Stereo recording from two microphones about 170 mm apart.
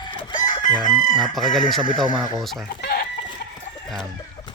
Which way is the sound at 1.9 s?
25° right (ahead or behind).